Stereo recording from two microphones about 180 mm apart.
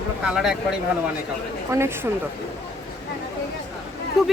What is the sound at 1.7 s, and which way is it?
Speech, 15° right (ahead or behind).